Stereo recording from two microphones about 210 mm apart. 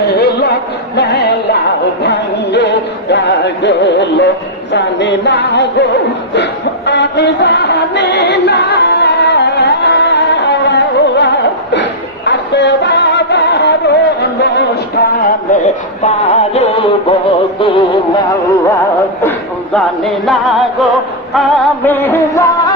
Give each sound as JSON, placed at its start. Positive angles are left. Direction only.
{"t": 0.2, "sound": "music", "side_deg": 50}
{"t": 19.7, "sound": "music", "side_deg": 0}
{"t": 21.8, "sound": "music", "side_deg": 10}